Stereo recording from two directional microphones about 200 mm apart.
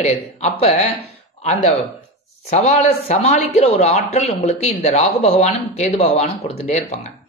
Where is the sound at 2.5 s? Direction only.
35° left (ahead or behind).